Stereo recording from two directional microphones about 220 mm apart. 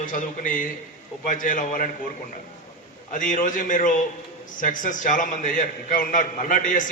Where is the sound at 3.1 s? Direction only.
35° left (ahead or behind).